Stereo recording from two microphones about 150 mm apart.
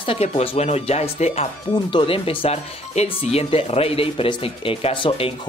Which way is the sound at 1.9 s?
35° left (ahead or behind).